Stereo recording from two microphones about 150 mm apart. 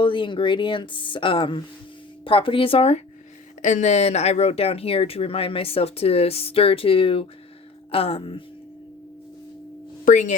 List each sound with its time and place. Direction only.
0.0 s speech: 35° left (ahead or behind)
3.6 s speech: 55° left (ahead or behind); by 8.4 s 35° left (ahead or behind)
10.1 s speech: 55° left (ahead or behind)